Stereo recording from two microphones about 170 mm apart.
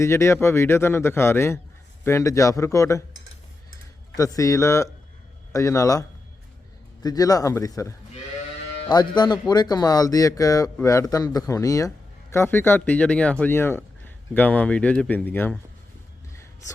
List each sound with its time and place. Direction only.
0.0 s a man's voice: 15° left (ahead or behind)
4.2 s a man's voice: 20° left (ahead or behind)
16.3 s a sound: 15° left (ahead or behind)